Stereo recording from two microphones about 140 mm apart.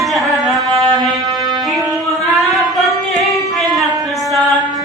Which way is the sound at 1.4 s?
25° right (ahead or behind).